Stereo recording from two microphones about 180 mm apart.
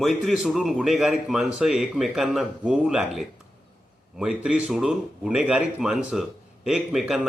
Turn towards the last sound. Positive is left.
turn(degrees=-5)  # may be behind; listen again after turning